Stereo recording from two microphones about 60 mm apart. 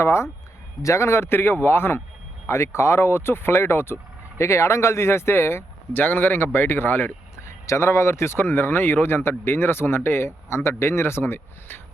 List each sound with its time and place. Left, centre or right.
0.0 s a sound: left
0.8 s speech: left
2.5 s speech: left
7.4 s speech: left